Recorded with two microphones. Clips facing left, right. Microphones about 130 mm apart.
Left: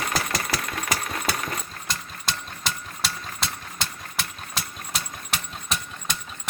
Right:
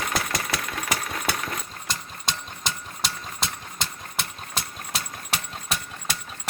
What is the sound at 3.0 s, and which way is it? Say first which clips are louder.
Engine: even; 20° right (ahead or behind).